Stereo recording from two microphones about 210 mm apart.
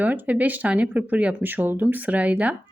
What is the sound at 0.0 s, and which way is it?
Speech, 10° right (ahead or behind).